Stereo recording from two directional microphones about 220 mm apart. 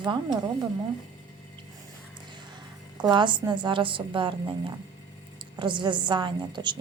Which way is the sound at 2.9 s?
20° right (ahead or behind).